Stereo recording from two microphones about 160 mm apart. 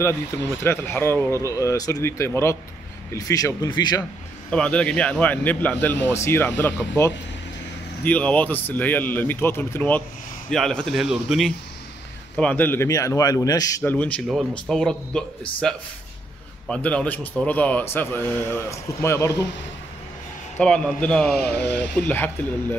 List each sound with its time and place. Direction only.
0.7 s a man's voice: 15° left (ahead or behind)
4.5 s a man's voice: 5° left (ahead or behind)
8.0 s a man's voice: 10° left (ahead or behind)
16.6 s a man's voice: 5° left (ahead or behind)
20.5 s a man's voice: 5° left (ahead or behind)